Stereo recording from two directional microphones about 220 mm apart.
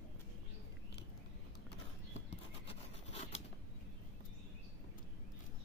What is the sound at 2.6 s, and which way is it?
Rub, 30° left (ahead or behind).